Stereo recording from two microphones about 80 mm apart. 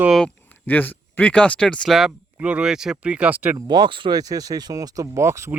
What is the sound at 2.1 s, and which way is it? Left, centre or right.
Speech, centre.